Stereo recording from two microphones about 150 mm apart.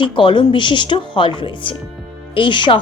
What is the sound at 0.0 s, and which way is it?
Speech, 30° left (ahead or behind).